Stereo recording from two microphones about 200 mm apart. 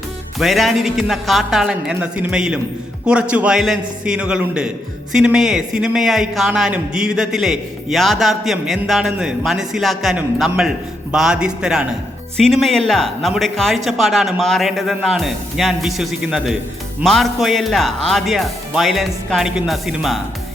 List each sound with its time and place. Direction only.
0.3 s a man's voice: centre (ahead or behind)